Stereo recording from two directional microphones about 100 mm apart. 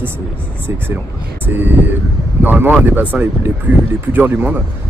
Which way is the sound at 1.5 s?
20° right (ahead or behind).